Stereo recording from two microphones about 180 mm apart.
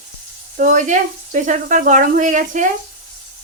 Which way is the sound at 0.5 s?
45° right (ahead or behind).